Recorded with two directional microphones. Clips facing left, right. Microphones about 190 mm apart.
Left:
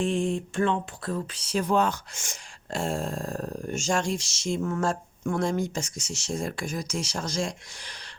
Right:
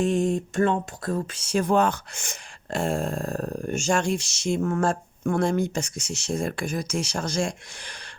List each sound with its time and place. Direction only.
0.0 s speech: 45° right (ahead or behind)